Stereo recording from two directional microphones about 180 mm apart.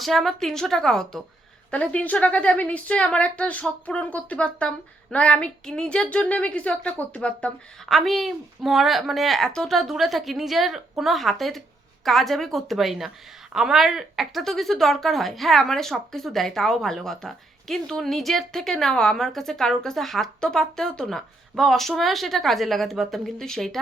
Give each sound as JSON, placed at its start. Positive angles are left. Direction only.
{"t": 0.0, "sound": "a woman's voice", "side_deg": 0}